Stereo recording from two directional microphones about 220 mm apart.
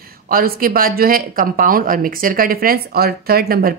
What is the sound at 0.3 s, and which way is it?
Speech, 40° right (ahead or behind).